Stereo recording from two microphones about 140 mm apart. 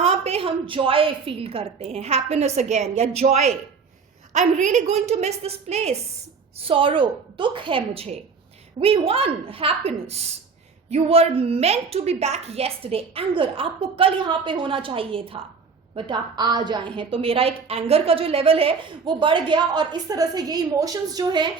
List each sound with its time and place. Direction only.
0.0 s a woman's voice: 45° right (ahead or behind)
6.6 s a woman's voice: 40° right (ahead or behind)